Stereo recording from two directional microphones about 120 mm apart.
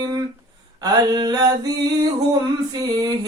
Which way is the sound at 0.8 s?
35° right (ahead or behind).